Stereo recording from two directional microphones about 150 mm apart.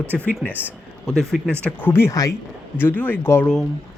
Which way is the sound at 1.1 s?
Centre (ahead or behind).